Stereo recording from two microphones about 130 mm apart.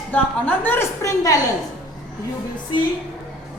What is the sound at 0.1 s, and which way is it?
A woman's voice, 15° left (ahead or behind).